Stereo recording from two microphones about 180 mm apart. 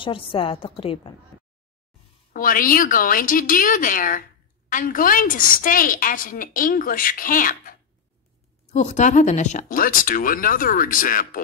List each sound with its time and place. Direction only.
0.0 s a woman's voice: 30° left (ahead or behind)
2.3 s a woman's voice: 50° left (ahead or behind)